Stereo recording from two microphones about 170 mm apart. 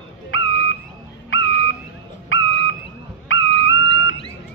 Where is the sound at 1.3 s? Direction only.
90° left.